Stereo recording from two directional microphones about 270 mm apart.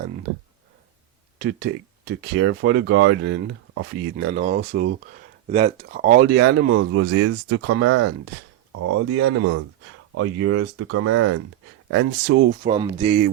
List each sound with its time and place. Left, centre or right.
1.4 s speech: right
12.6 s speech: centre